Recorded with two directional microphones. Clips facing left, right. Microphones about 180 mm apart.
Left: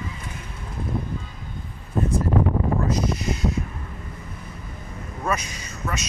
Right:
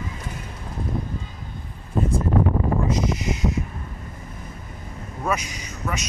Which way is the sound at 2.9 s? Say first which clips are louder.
Right 1 dB; 20° right (ahead or behind).